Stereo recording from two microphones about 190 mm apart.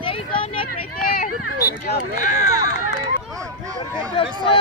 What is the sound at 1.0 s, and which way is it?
Speech, 50° left (ahead or behind).